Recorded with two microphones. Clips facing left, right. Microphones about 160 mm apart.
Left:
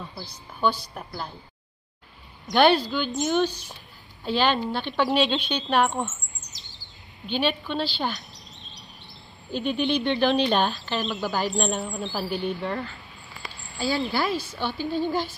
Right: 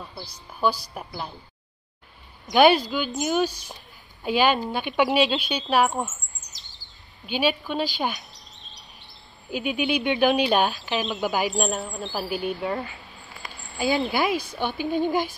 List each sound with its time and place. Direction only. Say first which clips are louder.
0.2 s a woman's voice: right 1 dB; 10° right (ahead or behind)
2.4 s a woman's voice: right 2 dB; centre (ahead or behind)
5.0 s bird vocalization: right 1 dB; 5° right (ahead or behind)
8.1 s chirp: left 1 dB; centre (ahead or behind)
11.2 s a woman's voice: right 3 dB; 15° right (ahead or behind)
11.5 s speech: even; centre (ahead or behind)
13.7 s a woman's voice: right 2 dB; 20° right (ahead or behind)